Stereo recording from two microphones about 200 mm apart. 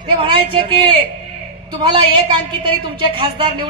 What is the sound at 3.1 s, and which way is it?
Speech, 25° right (ahead or behind).